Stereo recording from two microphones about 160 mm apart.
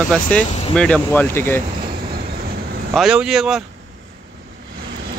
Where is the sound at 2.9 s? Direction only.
Centre (ahead or behind).